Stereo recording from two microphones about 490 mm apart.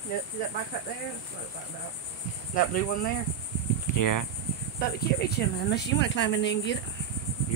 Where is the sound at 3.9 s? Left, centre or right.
Left.